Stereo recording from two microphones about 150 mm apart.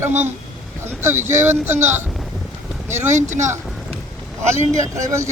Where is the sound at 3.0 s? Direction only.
55° right (ahead or behind).